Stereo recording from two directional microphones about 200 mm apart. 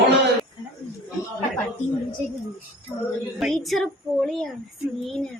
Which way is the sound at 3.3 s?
Centre (ahead or behind).